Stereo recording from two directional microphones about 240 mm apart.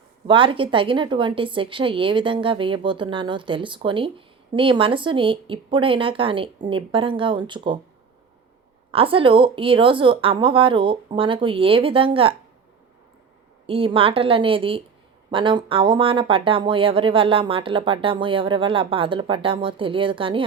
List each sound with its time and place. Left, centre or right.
0.3 s speech: right
8.9 s speech: right
13.7 s speech: right